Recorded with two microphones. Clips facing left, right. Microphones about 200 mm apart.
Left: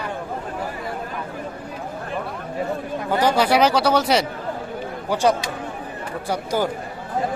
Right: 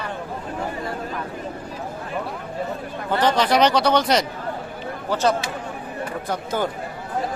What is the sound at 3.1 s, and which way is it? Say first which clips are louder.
Speech: left 1 dB; 10° left (ahead or behind).